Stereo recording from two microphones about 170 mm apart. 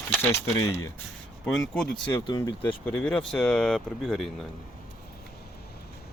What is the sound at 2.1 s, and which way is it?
Speech, 25° left (ahead or behind).